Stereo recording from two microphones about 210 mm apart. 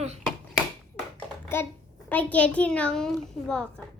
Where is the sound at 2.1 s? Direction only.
5° left (ahead or behind).